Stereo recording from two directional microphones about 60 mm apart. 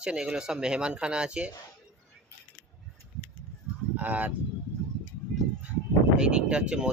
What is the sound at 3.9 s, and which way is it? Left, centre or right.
Speech, right.